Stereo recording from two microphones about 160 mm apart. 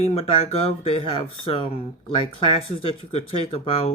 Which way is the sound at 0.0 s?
40° left (ahead or behind).